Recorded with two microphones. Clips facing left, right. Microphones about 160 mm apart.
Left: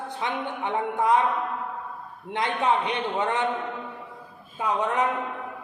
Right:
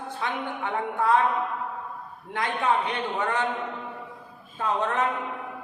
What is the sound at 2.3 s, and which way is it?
A man's voice, 20° left (ahead or behind).